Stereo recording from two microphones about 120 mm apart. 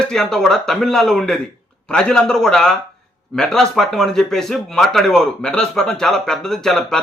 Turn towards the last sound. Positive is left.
turn(degrees=5)  # may be behind; listen again after turning